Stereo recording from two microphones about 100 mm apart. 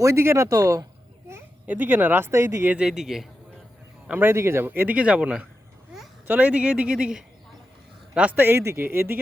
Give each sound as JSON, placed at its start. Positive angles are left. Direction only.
{"t": 0.0, "sound": "speech", "side_deg": -30}
{"t": 1.3, "sound": "speech", "side_deg": -20}
{"t": 2.7, "sound": "speech", "side_deg": -5}
{"t": 4.0, "sound": "a man's voice", "side_deg": -15}